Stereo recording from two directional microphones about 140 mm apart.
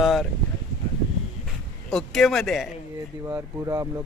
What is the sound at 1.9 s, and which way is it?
Speech, 5° left (ahead or behind).